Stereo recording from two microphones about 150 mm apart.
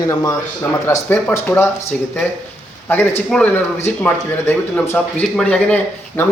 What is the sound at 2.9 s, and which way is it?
Speech, 15° left (ahead or behind).